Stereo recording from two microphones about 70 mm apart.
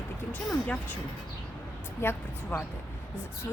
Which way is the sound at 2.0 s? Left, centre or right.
Left.